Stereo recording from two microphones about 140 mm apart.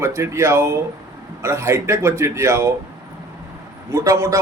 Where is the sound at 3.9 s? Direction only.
20° right (ahead or behind).